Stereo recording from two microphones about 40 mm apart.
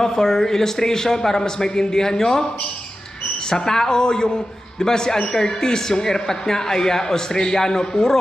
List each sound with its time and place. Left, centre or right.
0.0 s a woman's voice: centre
3.5 s a woman's voice: centre